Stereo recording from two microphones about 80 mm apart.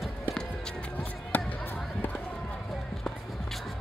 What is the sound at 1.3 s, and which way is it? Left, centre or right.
Basketball bounce, left.